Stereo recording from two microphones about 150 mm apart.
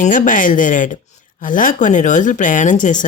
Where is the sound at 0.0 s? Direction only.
60° left (ahead or behind).